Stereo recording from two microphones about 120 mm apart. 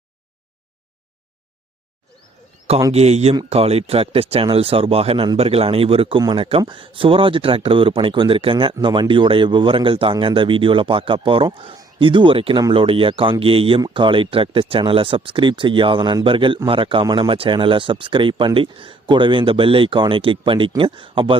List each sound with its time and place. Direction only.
2.9 s speech: 60° right (ahead or behind); by 21.3 s 45° right (ahead or behind)